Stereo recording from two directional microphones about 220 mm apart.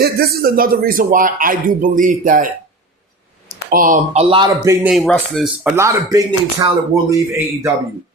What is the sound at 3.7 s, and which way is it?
Speech, 35° right (ahead or behind).